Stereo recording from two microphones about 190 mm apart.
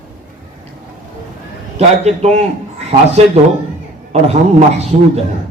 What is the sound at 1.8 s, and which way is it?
Speech, 35° right (ahead or behind).